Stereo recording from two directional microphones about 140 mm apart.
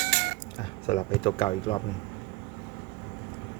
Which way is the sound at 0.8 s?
40° left (ahead or behind).